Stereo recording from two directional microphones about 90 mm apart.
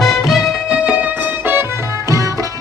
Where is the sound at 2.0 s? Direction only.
40° right (ahead or behind).